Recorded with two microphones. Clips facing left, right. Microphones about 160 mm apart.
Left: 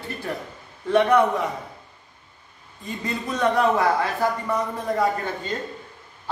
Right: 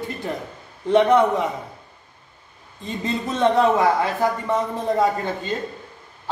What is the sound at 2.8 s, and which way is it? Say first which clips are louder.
Speech: right 4 dB; 25° right (ahead or behind).